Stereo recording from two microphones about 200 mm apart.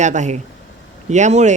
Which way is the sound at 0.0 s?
35° right (ahead or behind).